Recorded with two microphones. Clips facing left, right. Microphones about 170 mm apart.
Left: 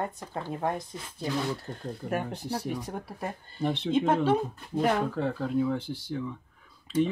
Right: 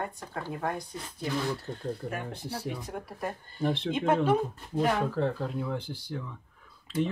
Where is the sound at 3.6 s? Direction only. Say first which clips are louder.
Even; centre (ahead or behind).